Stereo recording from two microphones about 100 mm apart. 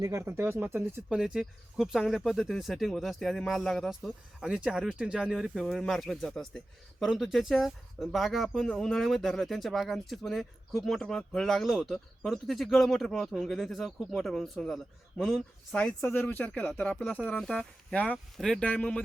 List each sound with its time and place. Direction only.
0.0 s speech: 25° right (ahead or behind)
1.1 s speech: 5° right (ahead or behind)
16.0 s speech: 25° left (ahead or behind)
16.2 s speech: 10° left (ahead or behind)
17.9 s speech: 15° left (ahead or behind)
18.3 s speech: 5° left (ahead or behind)